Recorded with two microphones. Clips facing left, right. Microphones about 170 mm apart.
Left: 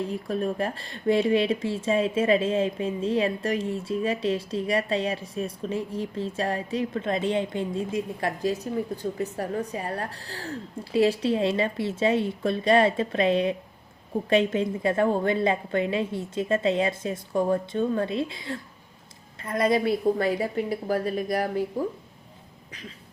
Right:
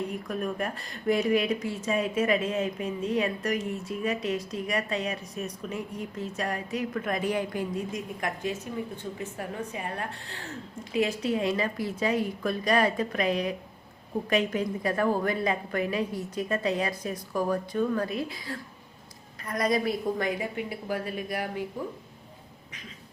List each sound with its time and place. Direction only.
0.0 s a woman's voice: 30° left (ahead or behind)